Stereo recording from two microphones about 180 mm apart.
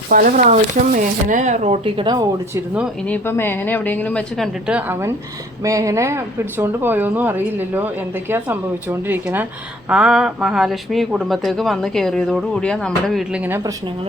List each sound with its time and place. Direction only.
0.1 s speech: 50° right (ahead or behind); by 2.2 s 25° right (ahead or behind)
3.1 s a woman's voice: 10° left (ahead or behind); by 13.6 s 5° right (ahead or behind)